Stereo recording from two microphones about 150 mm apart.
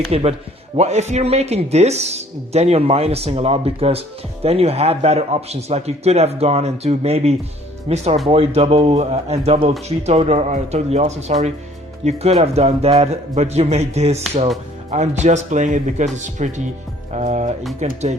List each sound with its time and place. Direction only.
0.1 s speech: 45° right (ahead or behind)